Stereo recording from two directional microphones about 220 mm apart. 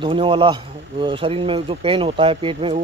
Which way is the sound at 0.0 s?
25° right (ahead or behind).